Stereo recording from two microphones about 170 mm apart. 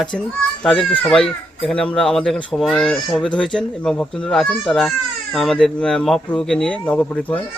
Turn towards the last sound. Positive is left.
turn(degrees=10)  # may be behind; listen again after turning